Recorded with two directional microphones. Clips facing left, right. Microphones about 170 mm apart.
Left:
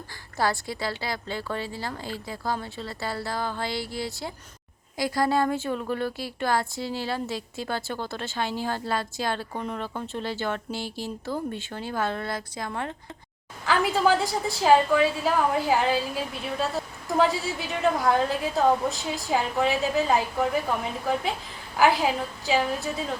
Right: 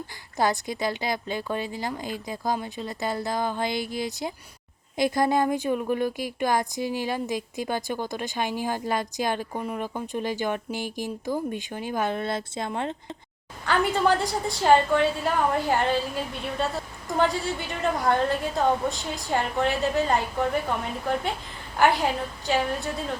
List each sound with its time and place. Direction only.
0.3 s a woman's voice: 20° right (ahead or behind)
13.7 s a woman's voice: centre (ahead or behind)
21.8 s a woman's voice: centre (ahead or behind)